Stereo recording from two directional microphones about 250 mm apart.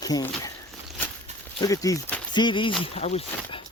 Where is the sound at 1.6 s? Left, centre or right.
Centre.